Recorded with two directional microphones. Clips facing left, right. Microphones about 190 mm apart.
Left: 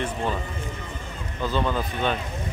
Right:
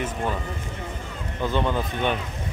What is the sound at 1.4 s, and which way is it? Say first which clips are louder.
Speech: right 1 dB; 20° right (ahead or behind).